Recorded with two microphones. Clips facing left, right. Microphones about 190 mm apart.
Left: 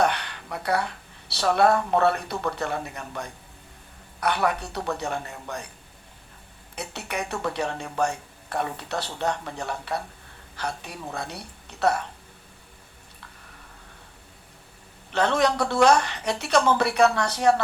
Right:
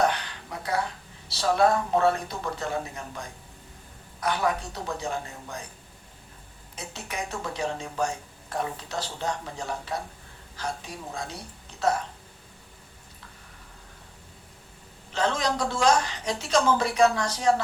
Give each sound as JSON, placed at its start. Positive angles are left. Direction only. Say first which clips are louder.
{"t": 0.0, "sound": "speech", "louder": "left 1 dB", "side_deg": 65}
{"t": 6.7, "sound": "speech", "louder": "left 4 dB", "side_deg": 65}
{"t": 15.1, "sound": "speech", "louder": "left 4 dB", "side_deg": 65}